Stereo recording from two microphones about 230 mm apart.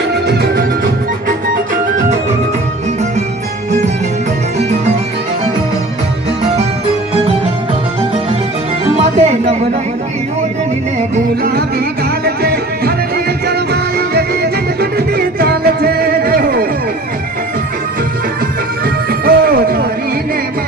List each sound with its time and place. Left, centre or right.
0.3 s music: right
8.8 s music: right
11.1 s music: right
19.2 s music: right